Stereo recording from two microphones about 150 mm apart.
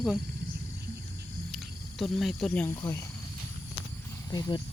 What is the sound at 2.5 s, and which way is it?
Speech, 10° left (ahead or behind).